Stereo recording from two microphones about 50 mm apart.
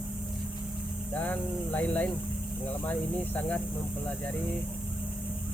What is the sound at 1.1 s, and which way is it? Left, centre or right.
Speech, left.